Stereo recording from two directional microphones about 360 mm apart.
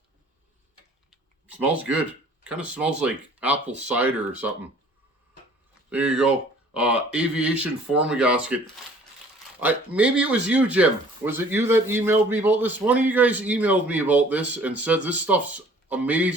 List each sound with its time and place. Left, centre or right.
1.1 s a sound: centre
2.4 s speech: centre
5.9 s speech: centre